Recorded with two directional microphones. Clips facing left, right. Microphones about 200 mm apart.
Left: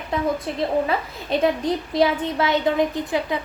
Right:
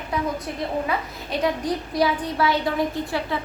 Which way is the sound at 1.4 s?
25° left (ahead or behind).